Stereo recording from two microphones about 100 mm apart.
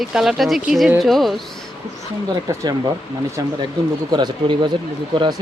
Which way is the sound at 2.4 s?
40° right (ahead or behind).